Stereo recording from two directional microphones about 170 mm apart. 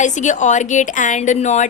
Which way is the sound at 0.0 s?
45° left (ahead or behind).